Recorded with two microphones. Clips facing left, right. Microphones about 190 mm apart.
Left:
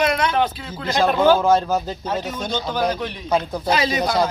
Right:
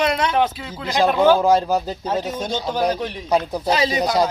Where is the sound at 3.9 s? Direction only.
15° right (ahead or behind).